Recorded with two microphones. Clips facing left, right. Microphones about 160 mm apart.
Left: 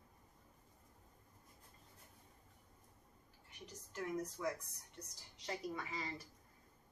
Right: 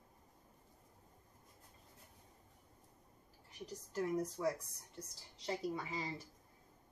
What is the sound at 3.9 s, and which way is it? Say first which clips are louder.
Speech: right 5 dB; 30° right (ahead or behind).